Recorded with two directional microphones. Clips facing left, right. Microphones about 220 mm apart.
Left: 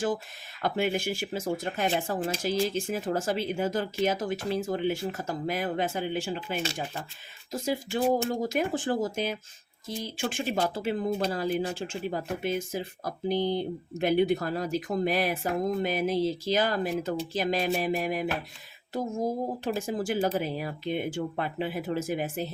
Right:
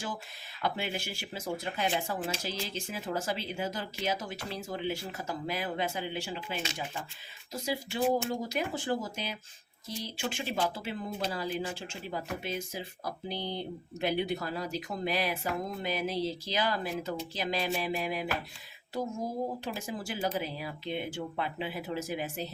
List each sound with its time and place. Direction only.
0.6 s speech: 50° left (ahead or behind)